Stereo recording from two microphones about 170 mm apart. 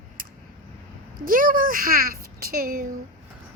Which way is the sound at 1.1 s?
55° right (ahead or behind).